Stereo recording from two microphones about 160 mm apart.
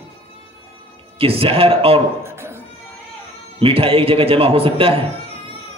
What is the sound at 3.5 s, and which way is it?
A man's voice, 35° right (ahead or behind).